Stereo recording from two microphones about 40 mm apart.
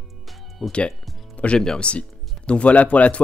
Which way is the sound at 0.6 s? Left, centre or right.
Centre.